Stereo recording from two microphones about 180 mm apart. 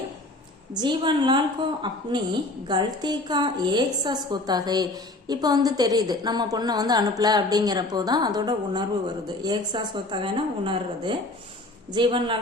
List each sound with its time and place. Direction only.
0.7 s a woman's voice: 25° right (ahead or behind)